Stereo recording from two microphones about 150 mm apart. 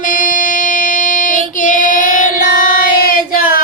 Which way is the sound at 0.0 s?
65° left (ahead or behind).